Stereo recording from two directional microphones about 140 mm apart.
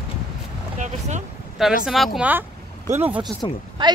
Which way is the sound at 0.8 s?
55° right (ahead or behind).